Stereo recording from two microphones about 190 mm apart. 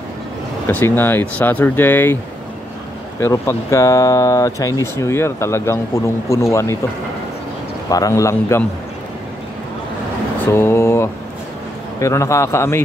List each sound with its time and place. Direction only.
0.7 s speech: 10° left (ahead or behind)
3.2 s speech: 15° left (ahead or behind)
7.9 s speech: 15° left (ahead or behind)
10.4 s speech: 10° left (ahead or behind)